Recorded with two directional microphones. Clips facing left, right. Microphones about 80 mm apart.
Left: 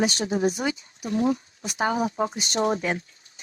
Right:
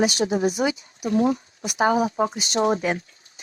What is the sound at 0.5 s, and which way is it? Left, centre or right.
Speech, centre.